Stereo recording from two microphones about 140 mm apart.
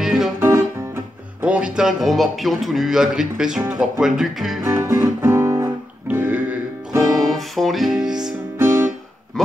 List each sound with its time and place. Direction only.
0.0 s music: centre (ahead or behind)
0.4 s music: 20° right (ahead or behind)
1.4 s speech: 5° right (ahead or behind)
4.6 s music: 20° right (ahead or behind)
7.0 s music: centre (ahead or behind)
8.5 s guitar: 15° right (ahead or behind)